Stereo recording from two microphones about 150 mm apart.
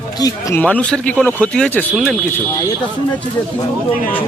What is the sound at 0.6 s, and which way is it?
Speech, 10° left (ahead or behind).